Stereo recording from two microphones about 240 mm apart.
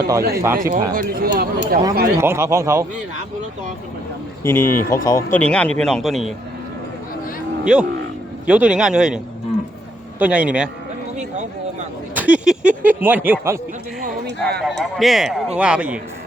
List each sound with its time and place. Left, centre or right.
0.2 s speech: right
2.2 s speech: centre
4.4 s speech: centre
7.6 s speech: centre
12.1 s speech: centre
14.3 s speech: right
14.8 s speech: centre